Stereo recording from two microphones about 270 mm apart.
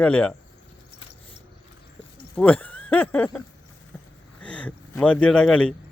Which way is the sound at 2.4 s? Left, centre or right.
Centre.